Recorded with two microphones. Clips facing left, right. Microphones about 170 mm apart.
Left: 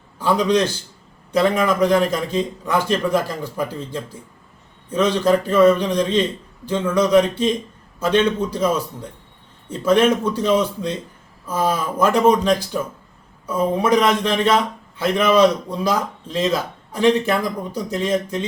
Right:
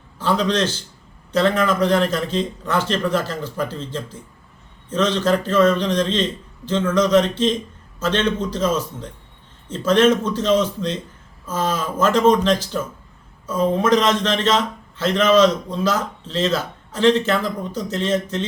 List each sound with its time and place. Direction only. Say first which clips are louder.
0.2 s a man's voice: left 2 dB; 15° left (ahead or behind)